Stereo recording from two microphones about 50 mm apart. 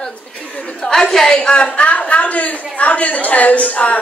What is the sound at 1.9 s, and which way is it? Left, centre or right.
A woman's voice, left.